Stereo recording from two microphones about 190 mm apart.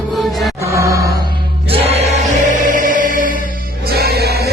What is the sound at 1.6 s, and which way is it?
Music, 30° right (ahead or behind).